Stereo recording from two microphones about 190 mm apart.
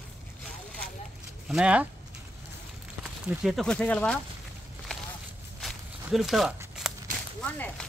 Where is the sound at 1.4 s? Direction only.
5° right (ahead or behind).